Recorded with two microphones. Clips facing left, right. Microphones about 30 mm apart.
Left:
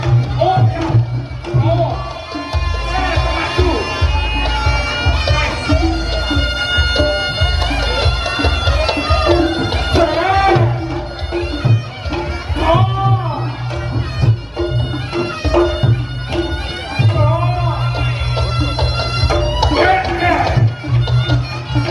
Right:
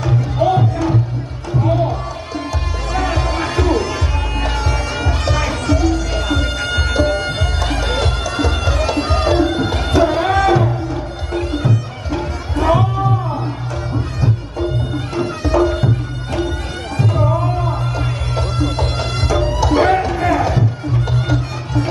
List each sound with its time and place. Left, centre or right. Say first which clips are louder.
0.4 s music: left 1 dB; left
5.7 s violin: even; left
11.3 s music: even; left
15.1 s bagpipes: left 2 dB; left
16.9 s music: even; left